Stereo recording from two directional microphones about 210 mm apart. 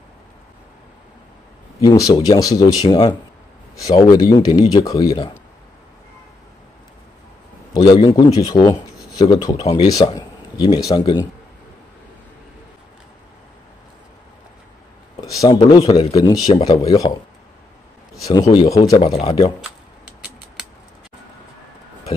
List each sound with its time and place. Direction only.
1.8 s speech: 15° left (ahead or behind)
7.7 s speech: 20° left (ahead or behind)
15.1 s a sound: 15° left (ahead or behind)
15.8 s speech: 30° left (ahead or behind)
18.5 s speech: 20° left (ahead or behind)